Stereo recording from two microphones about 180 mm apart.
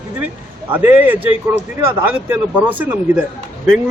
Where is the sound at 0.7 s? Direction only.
10° right (ahead or behind).